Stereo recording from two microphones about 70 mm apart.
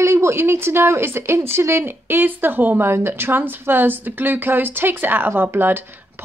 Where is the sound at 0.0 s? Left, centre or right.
Right.